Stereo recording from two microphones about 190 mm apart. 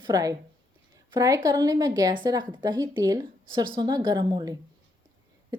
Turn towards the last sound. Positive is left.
turn(degrees=-20)  # may be behind; listen again after turning